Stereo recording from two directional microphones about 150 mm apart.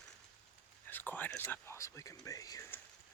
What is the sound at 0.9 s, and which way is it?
Speech, 10° left (ahead or behind).